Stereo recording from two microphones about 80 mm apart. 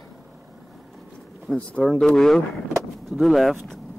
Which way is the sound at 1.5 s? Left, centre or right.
Centre.